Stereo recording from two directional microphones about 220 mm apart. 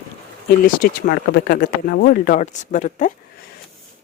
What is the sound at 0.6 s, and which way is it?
Speech, 40° left (ahead or behind).